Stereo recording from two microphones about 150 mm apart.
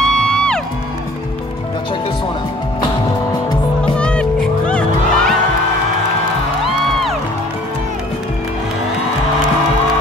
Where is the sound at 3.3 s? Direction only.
25° left (ahead or behind).